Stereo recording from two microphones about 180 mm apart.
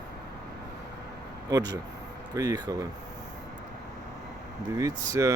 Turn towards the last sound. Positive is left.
turn(degrees=-20)  # may be behind; listen again after turning